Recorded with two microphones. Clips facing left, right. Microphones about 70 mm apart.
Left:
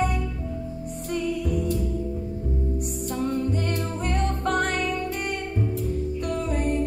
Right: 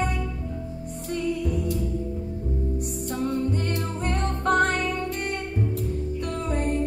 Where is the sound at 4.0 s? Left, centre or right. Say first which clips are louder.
Left 1 dB; right.